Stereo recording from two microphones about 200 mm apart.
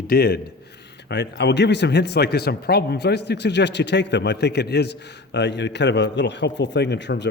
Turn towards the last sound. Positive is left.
turn(degrees=60)  # may be behind; listen again after turning